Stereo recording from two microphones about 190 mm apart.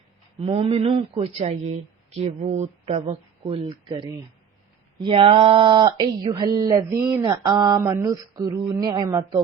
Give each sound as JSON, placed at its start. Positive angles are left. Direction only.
{"t": 0.3, "sound": "speech", "side_deg": -30}